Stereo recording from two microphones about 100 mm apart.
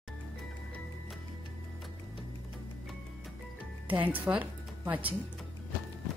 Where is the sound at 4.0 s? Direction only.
15° right (ahead or behind).